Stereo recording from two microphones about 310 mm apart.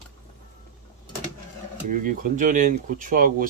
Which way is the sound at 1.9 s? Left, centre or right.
Right.